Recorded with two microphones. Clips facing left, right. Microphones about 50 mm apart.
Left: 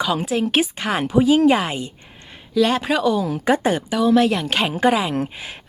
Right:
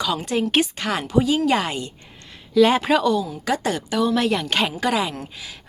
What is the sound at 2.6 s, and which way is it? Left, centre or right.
Speech, centre.